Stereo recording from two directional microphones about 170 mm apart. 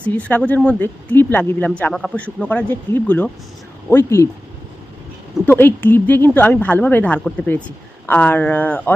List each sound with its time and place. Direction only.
0.1 s speech: 10° left (ahead or behind)
5.5 s speech: 10° left (ahead or behind)